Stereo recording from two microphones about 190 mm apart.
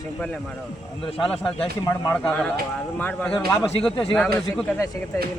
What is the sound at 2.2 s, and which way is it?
Speech, 5° left (ahead or behind).